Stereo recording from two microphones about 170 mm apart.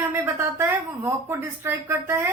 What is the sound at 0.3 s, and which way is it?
Speech, 10° right (ahead or behind).